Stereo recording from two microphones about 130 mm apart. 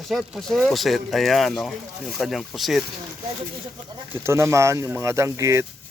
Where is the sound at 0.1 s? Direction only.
Centre (ahead or behind).